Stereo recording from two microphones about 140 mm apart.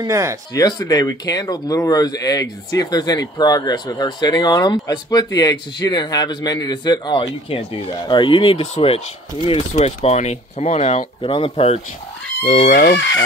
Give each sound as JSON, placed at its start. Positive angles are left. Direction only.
{"t": 0.0, "sound": "speech", "side_deg": -20}
{"t": 0.6, "sound": "speech", "side_deg": 30}
{"t": 12.6, "sound": "speech", "side_deg": 90}